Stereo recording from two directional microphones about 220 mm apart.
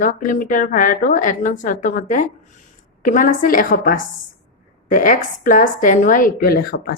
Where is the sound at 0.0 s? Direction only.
35° left (ahead or behind).